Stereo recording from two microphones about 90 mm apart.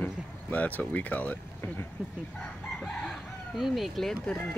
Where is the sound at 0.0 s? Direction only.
20° left (ahead or behind).